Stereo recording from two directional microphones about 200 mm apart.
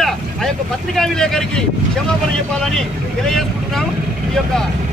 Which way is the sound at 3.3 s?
Centre (ahead or behind).